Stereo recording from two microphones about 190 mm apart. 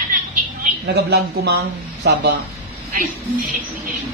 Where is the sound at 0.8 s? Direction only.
60° right (ahead or behind).